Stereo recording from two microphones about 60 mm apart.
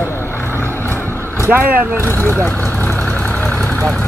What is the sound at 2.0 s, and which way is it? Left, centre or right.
Speech, left.